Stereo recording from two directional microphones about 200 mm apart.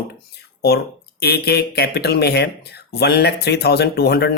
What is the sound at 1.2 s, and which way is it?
Speech, 55° left (ahead or behind).